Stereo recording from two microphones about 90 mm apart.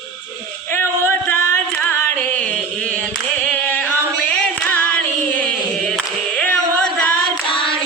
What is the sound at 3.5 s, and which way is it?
A capella, 15° left (ahead or behind).